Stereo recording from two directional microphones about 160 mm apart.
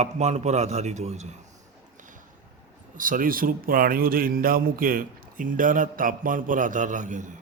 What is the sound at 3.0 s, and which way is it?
A man's voice, 60° right (ahead or behind).